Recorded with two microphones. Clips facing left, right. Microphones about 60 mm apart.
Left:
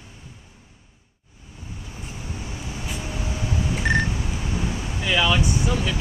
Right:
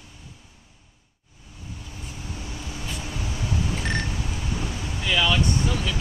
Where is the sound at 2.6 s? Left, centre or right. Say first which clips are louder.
Left 3 dB; left.